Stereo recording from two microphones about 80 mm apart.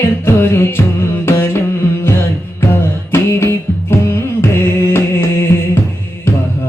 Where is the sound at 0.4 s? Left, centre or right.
Left.